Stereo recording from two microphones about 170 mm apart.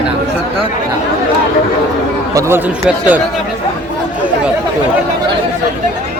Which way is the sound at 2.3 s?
15° right (ahead or behind).